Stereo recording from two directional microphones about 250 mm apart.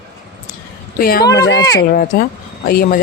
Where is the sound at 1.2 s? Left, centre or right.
Centre.